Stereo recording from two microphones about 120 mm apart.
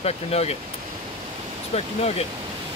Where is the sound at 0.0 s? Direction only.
60° left (ahead or behind).